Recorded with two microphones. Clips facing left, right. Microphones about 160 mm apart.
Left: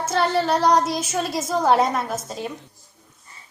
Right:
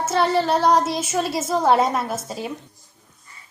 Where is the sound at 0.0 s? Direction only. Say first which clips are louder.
Right 1 dB; centre (ahead or behind).